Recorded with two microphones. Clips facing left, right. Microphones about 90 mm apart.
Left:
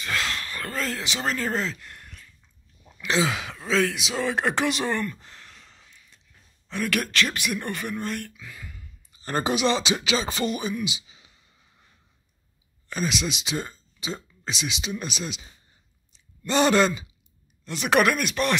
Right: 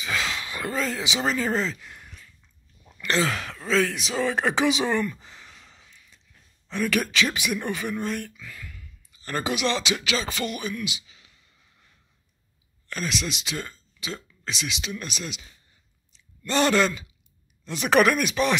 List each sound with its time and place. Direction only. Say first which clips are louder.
0.0 s speech: even; centre (ahead or behind)
8.5 s a sound: even; 25° left (ahead or behind)
9.7 s speech: left 2 dB; 25° left (ahead or behind)
12.8 s speech: left 2 dB; 15° left (ahead or behind)
16.4 s speech: left 1 dB; 15° left (ahead or behind)
17.6 s speech: right 1 dB; centre (ahead or behind)